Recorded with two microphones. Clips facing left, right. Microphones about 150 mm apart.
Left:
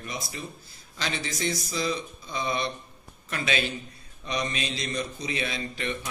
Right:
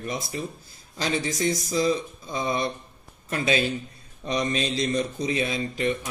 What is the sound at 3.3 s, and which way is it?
Speech, 35° right (ahead or behind).